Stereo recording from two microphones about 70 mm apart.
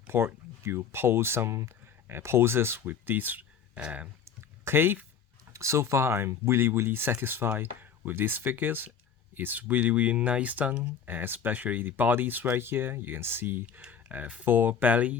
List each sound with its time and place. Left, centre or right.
0.1 s speech: right
3.8 s speech: centre
4.3 s a sound: right
5.5 s speech: right; by 15.2 s centre